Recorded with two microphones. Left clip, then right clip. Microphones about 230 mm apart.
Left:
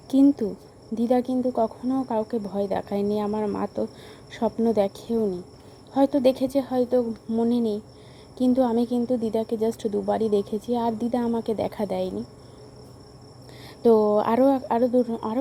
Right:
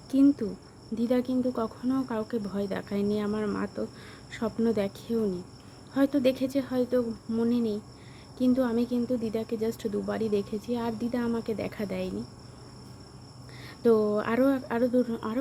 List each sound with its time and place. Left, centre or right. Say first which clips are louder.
0.1 s speech: left 4 dB; centre
13.8 s speech: left 5 dB; centre